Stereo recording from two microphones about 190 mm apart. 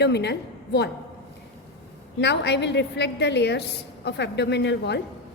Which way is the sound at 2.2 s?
65° left (ahead or behind).